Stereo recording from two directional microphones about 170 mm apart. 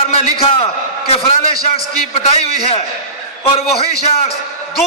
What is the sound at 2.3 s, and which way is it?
A man's voice, 35° left (ahead or behind).